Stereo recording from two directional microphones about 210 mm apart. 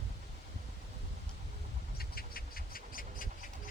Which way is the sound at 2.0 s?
45° left (ahead or behind).